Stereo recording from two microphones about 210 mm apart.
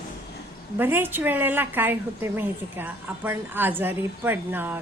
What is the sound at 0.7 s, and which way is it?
A woman's voice, 10° right (ahead or behind).